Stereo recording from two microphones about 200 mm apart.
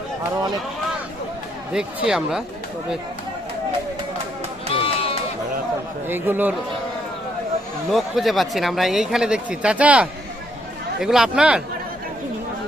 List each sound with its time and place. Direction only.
2.0 s speech: 5° right (ahead or behind)
4.7 s sheep: 30° left (ahead or behind)
6.1 s a man's voice: 10° right (ahead or behind)
7.9 s speech: centre (ahead or behind)